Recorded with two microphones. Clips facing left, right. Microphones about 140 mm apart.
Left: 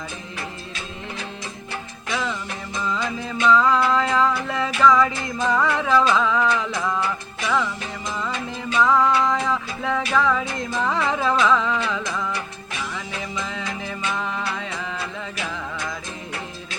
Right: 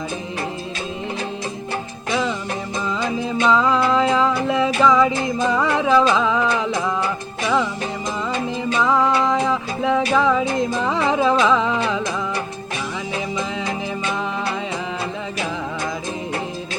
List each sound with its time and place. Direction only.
2.8 s music: 15° right (ahead or behind)
8.8 s music: 20° right (ahead or behind)
13.1 s music: 15° right (ahead or behind)